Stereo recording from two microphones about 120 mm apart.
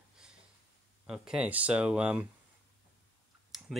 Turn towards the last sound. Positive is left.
turn(degrees=0)  # may be behind; listen again after turning